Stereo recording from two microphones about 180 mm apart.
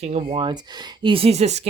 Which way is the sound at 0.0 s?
35° right (ahead or behind).